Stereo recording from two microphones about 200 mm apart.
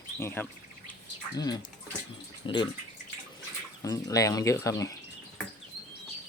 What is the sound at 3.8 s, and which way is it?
Speech, 15° left (ahead or behind).